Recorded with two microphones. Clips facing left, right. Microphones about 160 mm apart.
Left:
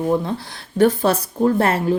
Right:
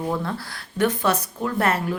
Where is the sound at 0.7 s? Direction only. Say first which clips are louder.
Left 6 dB; 30° left (ahead or behind).